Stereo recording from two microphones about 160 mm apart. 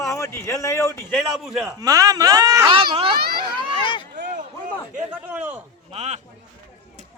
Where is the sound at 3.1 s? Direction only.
75° right (ahead or behind).